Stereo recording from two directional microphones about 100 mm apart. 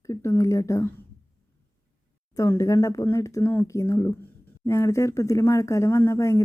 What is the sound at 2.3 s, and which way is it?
Speech, 35° left (ahead or behind).